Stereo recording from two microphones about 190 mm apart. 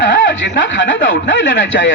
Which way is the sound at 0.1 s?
80° left.